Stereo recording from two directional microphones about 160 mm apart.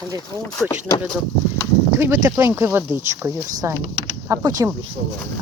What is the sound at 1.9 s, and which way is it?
Speech, 15° right (ahead or behind).